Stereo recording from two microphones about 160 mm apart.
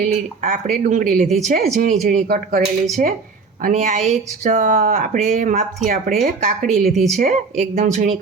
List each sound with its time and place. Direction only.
0.0 s speech: 50° right (ahead or behind); by 2.6 s 65° right (ahead or behind)
3.6 s speech: 50° right (ahead or behind)
6.7 s a woman's voice: centre (ahead or behind)
7.2 s speech: 45° right (ahead or behind)